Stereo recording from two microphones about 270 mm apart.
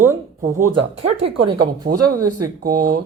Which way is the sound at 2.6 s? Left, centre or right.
Right.